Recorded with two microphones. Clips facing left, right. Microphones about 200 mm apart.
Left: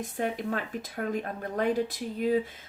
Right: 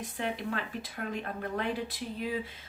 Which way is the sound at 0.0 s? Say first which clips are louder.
Left 4 dB; 45° left (ahead or behind).